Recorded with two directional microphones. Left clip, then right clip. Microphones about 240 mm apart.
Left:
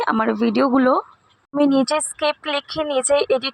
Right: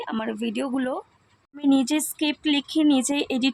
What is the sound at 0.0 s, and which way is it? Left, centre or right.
Speech, centre.